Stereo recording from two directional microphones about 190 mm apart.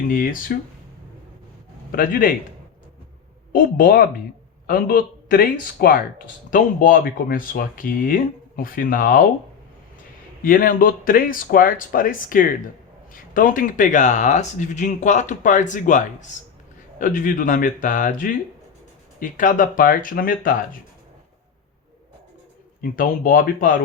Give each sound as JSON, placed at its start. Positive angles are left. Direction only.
{"t": 0.1, "sound": "speech", "side_deg": 45}
{"t": 2.0, "sound": "speech", "side_deg": 45}
{"t": 3.5, "sound": "speech", "side_deg": 45}
{"t": 10.4, "sound": "speech", "side_deg": 45}
{"t": 22.8, "sound": "speech", "side_deg": 45}